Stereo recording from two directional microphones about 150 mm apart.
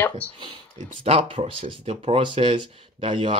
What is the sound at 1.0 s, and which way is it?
Speech, 40° right (ahead or behind).